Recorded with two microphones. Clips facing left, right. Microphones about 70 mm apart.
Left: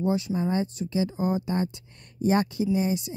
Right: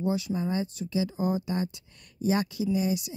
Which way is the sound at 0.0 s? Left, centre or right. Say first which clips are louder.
Left 3 dB; left.